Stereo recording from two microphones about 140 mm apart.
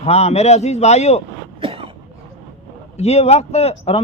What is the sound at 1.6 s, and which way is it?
Cough, 40° right (ahead or behind).